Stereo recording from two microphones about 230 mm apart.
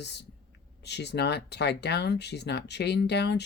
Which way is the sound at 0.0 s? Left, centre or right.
Left.